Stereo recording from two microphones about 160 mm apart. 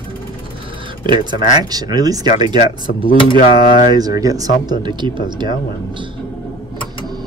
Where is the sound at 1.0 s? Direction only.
30° right (ahead or behind).